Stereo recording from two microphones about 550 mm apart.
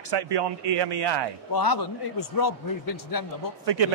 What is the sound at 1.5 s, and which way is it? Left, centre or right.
A man's voice, left.